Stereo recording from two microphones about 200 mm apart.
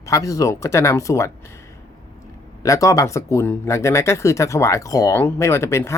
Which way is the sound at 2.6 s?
15° left (ahead or behind).